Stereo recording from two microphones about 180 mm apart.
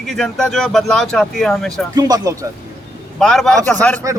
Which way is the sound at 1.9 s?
20° right (ahead or behind).